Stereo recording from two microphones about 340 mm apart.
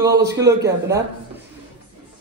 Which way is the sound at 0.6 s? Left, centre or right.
Centre.